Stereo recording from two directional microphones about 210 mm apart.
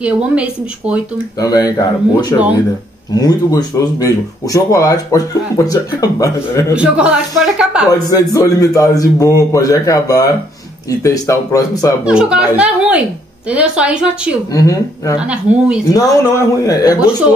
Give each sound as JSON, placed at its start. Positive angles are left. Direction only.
{"t": 0.0, "sound": "speech", "side_deg": -5}
{"t": 1.4, "sound": "speech", "side_deg": 15}
{"t": 6.7, "sound": "speech", "side_deg": -5}
{"t": 8.1, "sound": "speech", "side_deg": 15}
{"t": 12.0, "sound": "speech", "side_deg": -5}
{"t": 14.5, "sound": "speech", "side_deg": 15}
{"t": 15.1, "sound": "speech", "side_deg": -5}
{"t": 15.8, "sound": "speech", "side_deg": 15}